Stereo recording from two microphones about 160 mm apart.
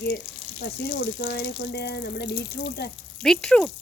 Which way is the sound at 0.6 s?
90° left.